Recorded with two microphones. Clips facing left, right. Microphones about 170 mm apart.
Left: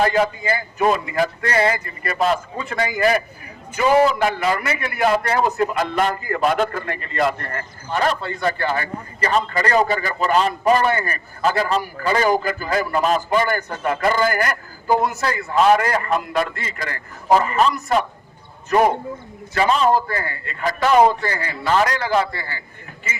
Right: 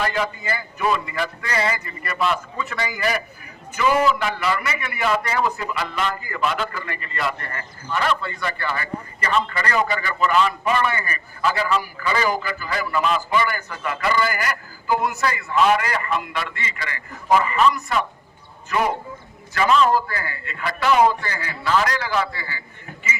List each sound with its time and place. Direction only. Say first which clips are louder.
0.0 s a man's voice: left 6 dB; 45° left (ahead or behind)
20.1 s a man's voice: left 4 dB; 45° left (ahead or behind)